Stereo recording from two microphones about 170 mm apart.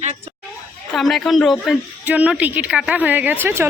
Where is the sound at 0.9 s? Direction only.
Centre (ahead or behind).